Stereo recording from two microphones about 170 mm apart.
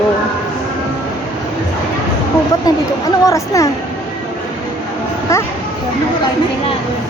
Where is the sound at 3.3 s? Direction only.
20° left (ahead or behind).